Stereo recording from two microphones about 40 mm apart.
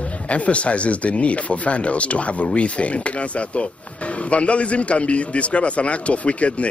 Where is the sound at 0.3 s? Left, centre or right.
Left.